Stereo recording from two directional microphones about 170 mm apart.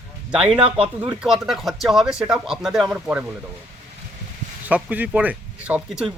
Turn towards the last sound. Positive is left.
turn(degrees=-5)  # may be behind; listen again after turning